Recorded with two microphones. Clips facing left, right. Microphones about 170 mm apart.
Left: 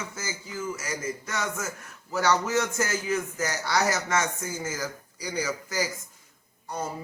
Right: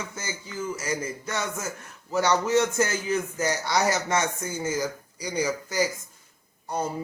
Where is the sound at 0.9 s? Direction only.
30° right (ahead or behind).